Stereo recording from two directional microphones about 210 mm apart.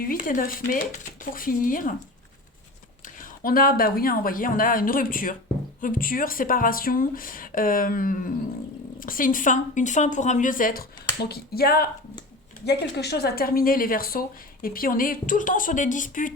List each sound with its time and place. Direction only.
0.0 s speech: 40° left (ahead or behind)
3.0 s speech: 40° left (ahead or behind)